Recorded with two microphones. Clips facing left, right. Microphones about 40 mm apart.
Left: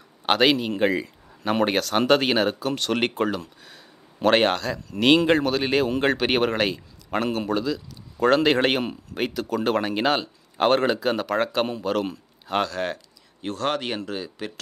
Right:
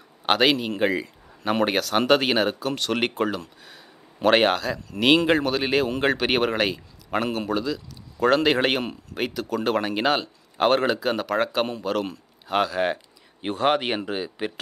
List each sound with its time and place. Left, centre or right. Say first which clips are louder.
0.3 s speech: left 1 dB; centre
12.7 s speech: right 4 dB; centre